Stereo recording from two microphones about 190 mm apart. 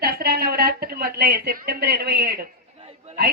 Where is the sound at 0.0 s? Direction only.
55° right (ahead or behind).